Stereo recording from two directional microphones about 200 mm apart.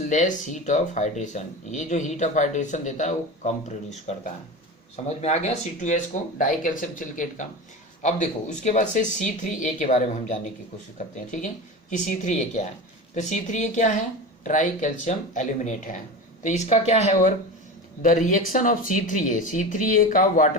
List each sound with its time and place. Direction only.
0.0 s speech: 40° left (ahead or behind)
7.2 s speech: 40° left (ahead or behind)